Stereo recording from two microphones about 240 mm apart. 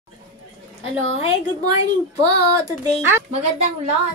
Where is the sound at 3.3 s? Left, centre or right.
Right.